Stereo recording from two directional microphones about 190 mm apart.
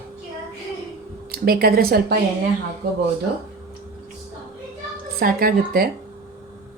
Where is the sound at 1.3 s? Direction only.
55° right (ahead or behind).